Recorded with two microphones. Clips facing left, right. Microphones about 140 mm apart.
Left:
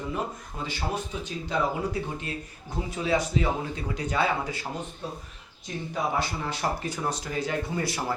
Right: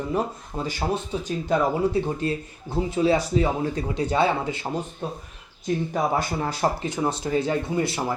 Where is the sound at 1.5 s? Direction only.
50° right (ahead or behind).